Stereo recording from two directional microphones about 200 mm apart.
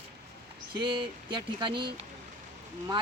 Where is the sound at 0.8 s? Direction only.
25° right (ahead or behind).